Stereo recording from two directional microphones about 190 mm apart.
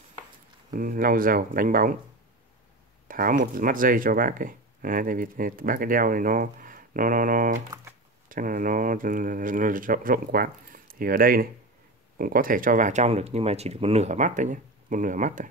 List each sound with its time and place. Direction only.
0.7 s speech: 45° right (ahead or behind)
3.1 s speech: 45° right (ahead or behind)